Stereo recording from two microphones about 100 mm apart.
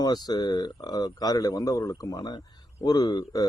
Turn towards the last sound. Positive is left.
turn(degrees=40)  # may be behind; listen again after turning